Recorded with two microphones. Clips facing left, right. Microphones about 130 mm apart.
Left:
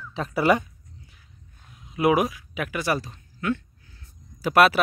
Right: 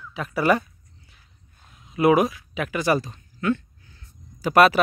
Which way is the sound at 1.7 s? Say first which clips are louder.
Right 3 dB; 5° left (ahead or behind).